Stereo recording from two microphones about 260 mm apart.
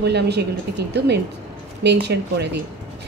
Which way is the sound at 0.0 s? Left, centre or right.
Right.